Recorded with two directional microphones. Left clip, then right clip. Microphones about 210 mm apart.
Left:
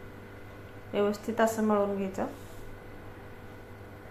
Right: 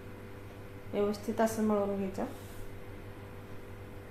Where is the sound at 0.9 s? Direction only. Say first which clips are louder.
Left 4 dB; 20° left (ahead or behind).